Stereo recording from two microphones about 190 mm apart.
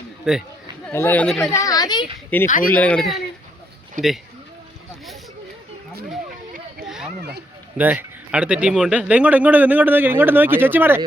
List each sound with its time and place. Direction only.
0.3 s speech: 5° right (ahead or behind)
0.9 s speech: 10° left (ahead or behind)
1.5 s a sound: 20° left (ahead or behind)
2.3 s speech: 10° left (ahead or behind)
4.0 s speech: 40° right (ahead or behind)
6.8 s a sound: 5° right (ahead or behind)
7.8 s speech: 10° right (ahead or behind)